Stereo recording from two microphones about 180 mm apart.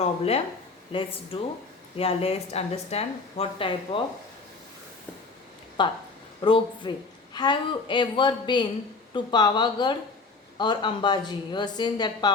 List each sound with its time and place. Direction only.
0.0 s speech: 35° left (ahead or behind)
5.8 s a woman's voice: 25° left (ahead or behind)